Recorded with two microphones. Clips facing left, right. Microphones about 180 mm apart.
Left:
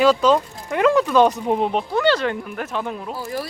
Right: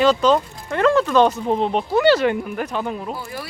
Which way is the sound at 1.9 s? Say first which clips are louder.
Right 6 dB; 10° right (ahead or behind).